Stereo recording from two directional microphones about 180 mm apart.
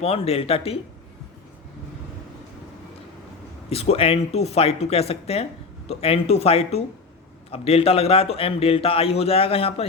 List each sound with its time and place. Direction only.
0.0 s a man's voice: 35° left (ahead or behind)
3.7 s a man's voice: 35° left (ahead or behind)